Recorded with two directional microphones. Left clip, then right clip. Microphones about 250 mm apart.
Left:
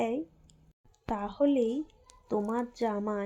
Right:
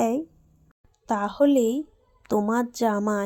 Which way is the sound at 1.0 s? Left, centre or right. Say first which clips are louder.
Right 7 dB; right.